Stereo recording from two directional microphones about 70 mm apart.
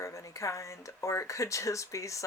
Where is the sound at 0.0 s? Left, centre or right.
Left.